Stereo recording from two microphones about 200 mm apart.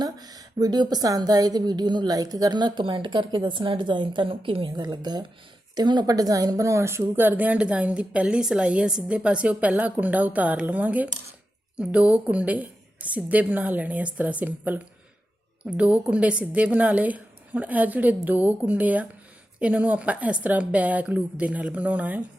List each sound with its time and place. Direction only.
0.0 s a woman's voice: 20° right (ahead or behind)